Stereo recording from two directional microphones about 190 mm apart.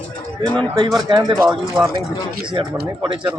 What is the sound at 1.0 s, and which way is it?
Speech, 20° right (ahead or behind).